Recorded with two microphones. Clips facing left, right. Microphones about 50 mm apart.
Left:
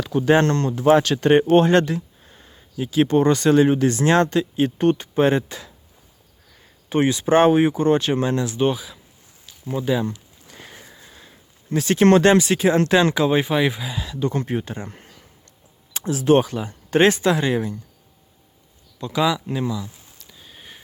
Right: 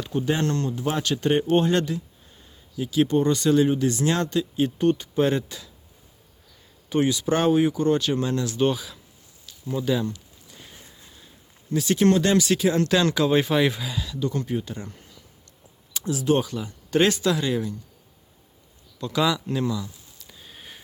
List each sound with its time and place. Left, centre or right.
0.0 s speech: left
0.3 s speech: left
1.7 s speech: left
6.9 s speech: left
8.4 s speech: centre
9.8 s speech: left
10.4 s sniff: left
11.1 s a sound: left
11.7 s speech: left
12.3 s speech: left
13.0 s speech: left
14.0 s speech: left
18.9 s speech: centre
20.2 s sniff: centre